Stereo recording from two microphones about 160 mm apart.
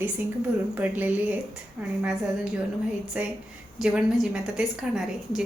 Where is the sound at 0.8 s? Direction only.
10° right (ahead or behind).